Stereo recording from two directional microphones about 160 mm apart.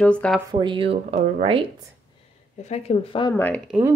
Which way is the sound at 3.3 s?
10° left (ahead or behind).